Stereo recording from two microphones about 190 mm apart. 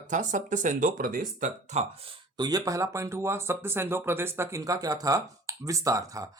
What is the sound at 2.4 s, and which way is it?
Speech, 20° right (ahead or behind).